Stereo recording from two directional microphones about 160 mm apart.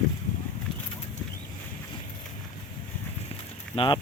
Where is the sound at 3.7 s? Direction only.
40° left (ahead or behind).